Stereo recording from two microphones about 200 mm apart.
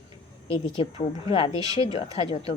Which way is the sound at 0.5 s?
25° left (ahead or behind).